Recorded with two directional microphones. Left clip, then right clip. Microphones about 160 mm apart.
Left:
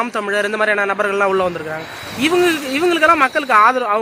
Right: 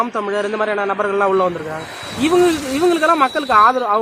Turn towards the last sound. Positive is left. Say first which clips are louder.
# even
turn(degrees=0)  # may be behind; listen again after turning